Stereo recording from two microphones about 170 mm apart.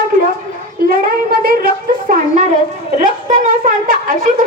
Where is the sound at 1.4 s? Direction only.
55° right (ahead or behind).